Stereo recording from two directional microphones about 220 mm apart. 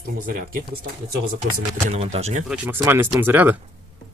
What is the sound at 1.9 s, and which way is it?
Speech, 30° right (ahead or behind).